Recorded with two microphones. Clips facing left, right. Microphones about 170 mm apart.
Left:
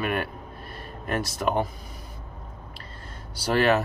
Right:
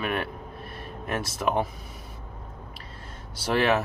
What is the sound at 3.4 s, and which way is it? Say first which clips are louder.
Speech: left 2 dB; centre (ahead or behind).